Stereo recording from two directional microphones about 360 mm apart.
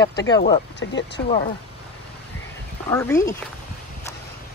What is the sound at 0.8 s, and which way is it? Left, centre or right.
Speech, left.